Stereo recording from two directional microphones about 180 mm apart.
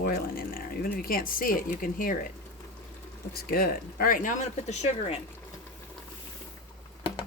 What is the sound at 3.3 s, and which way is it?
Speech, 55° left (ahead or behind).